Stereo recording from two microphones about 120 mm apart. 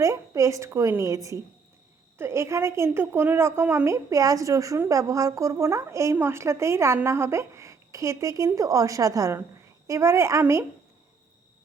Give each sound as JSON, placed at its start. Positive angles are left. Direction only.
{"t": 0.0, "sound": "speech", "side_deg": -25}